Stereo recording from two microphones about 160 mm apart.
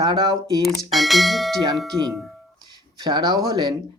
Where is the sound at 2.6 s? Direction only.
25° right (ahead or behind).